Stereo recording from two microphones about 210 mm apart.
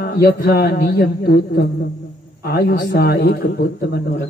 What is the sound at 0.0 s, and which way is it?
A man's voice, 45° left (ahead or behind).